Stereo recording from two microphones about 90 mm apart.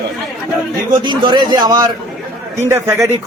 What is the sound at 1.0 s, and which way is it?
Speech, 60° right (ahead or behind).